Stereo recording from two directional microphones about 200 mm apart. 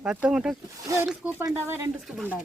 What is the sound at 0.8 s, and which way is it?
Speech, 15° right (ahead or behind).